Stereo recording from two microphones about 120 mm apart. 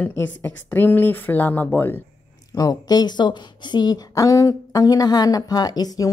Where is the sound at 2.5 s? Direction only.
35° left (ahead or behind).